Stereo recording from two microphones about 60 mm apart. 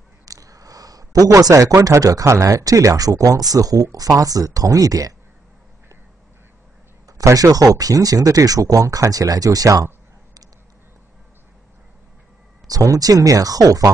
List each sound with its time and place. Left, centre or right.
0.2 s speech: right
7.2 s speech: right
12.6 s speech: right